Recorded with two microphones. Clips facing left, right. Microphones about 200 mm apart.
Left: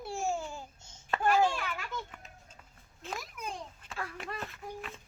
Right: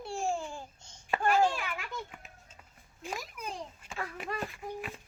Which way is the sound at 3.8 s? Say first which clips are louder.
Right 2 dB; 5° right (ahead or behind).